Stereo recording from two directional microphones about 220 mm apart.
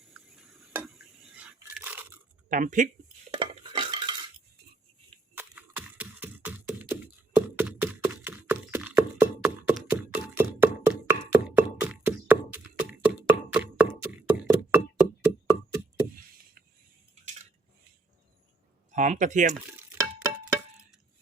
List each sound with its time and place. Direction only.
0.1 s a sound: centre (ahead or behind)
1.5 s biting: 10° right (ahead or behind)
2.5 s speech: 35° right (ahead or behind)
3.3 s stir: 20° right (ahead or behind)
5.3 s a sound: 10° right (ahead or behind)
18.9 s speech: 35° right (ahead or behind)
20.0 s music: 15° right (ahead or behind)